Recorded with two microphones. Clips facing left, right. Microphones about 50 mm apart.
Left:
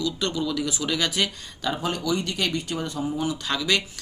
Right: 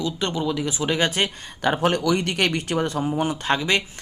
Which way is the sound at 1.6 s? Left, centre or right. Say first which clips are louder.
Right 6 dB; right.